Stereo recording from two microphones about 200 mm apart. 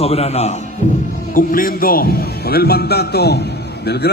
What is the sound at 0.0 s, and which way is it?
Speech, 30° left (ahead or behind).